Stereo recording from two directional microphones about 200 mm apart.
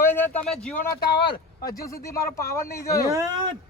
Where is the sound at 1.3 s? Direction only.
15° left (ahead or behind).